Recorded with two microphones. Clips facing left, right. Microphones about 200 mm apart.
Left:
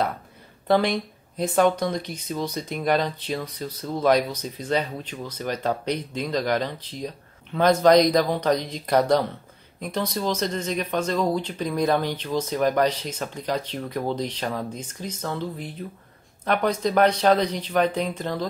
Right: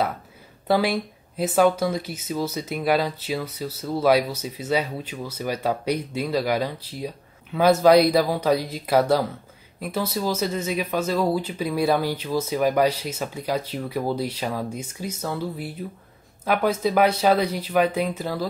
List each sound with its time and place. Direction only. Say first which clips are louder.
0.7 s speech: even; 5° right (ahead or behind)